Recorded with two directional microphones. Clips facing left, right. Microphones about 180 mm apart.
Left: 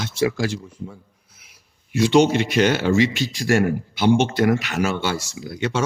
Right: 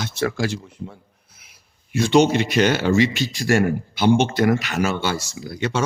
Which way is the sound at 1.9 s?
45° right (ahead or behind).